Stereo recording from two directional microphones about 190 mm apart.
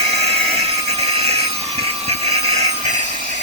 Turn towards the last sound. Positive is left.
turn(degrees=-40)  # may be behind; listen again after turning